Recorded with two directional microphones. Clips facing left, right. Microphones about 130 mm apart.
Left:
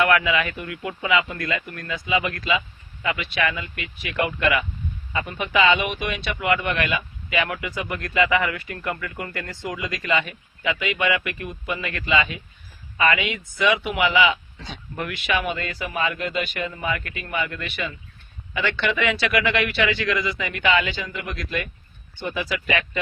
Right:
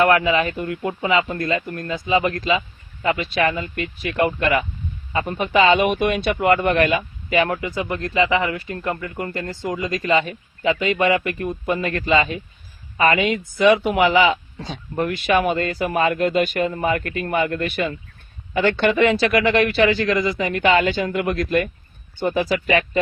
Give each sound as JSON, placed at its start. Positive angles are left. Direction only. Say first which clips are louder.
{"t": 0.0, "sound": "speech", "louder": "right 4 dB", "side_deg": -35}